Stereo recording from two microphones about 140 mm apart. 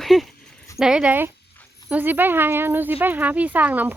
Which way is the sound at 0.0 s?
Centre (ahead or behind).